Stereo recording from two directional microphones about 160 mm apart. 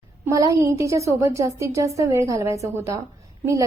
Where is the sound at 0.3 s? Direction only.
20° right (ahead or behind).